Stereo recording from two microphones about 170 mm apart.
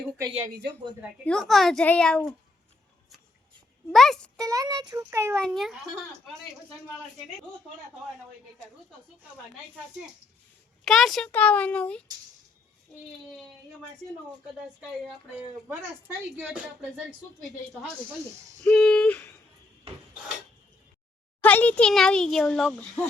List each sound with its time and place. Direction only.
1.2 s a child's voice: 5° left (ahead or behind)
3.9 s a child's voice: centre (ahead or behind)
4.4 s a child's voice: 20° right (ahead or behind)
5.4 s a child's voice: centre (ahead or behind)
10.8 s a woman's voice: centre (ahead or behind)
15.6 s a woman's voice: 10° right (ahead or behind)
18.6 s a woman's voice: 5° left (ahead or behind)
21.4 s a child's voice: 10° left (ahead or behind)